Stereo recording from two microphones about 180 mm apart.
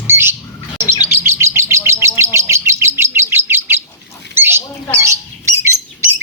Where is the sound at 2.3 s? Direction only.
15° right (ahead or behind).